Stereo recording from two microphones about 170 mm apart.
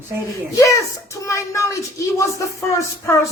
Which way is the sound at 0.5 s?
20° left (ahead or behind).